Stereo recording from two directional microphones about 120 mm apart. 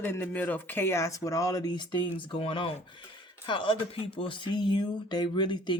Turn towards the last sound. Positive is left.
turn(degrees=40)  # may be behind; listen again after turning